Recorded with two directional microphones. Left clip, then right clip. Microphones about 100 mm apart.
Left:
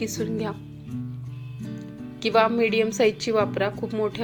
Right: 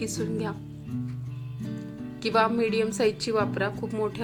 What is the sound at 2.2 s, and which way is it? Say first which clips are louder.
A woman's voice: left 4 dB; 15° left (ahead or behind).